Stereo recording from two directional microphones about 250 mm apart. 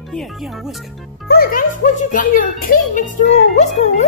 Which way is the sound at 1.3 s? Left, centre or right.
Left.